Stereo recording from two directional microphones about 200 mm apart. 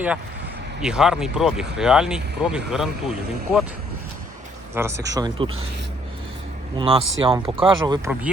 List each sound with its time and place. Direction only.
0.8 s speech: 5° right (ahead or behind)
4.7 s speech: 10° right (ahead or behind)
6.7 s speech: 30° right (ahead or behind)